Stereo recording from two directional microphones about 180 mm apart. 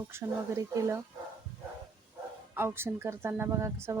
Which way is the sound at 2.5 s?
10° right (ahead or behind).